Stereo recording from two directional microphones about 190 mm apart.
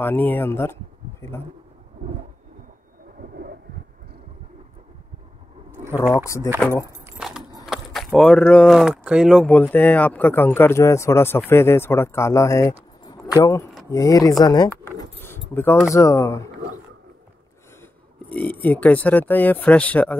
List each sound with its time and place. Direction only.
0.0 s speech: 10° left (ahead or behind)
1.2 s pigeon: 10° left (ahead or behind)
6.1 s speech: 15° left (ahead or behind)
7.2 s a sound: 5° right (ahead or behind)
7.6 s speech: centre (ahead or behind); by 12.7 s 15° left (ahead or behind)
13.0 s keys jangling: 20° left (ahead or behind)
13.4 s speech: 15° left (ahead or behind)
14.7 s keys jangling: 15° left (ahead or behind)
15.9 s speech: 15° left (ahead or behind)
18.3 s speech: 10° left (ahead or behind)